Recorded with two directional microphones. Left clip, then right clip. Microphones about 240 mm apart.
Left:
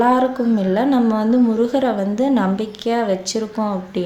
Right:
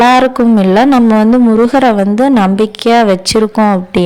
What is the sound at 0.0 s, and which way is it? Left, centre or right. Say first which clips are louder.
A woman's voice: right 9 dB; right.